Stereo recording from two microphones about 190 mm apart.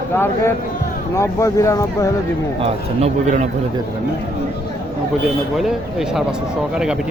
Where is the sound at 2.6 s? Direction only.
35° right (ahead or behind).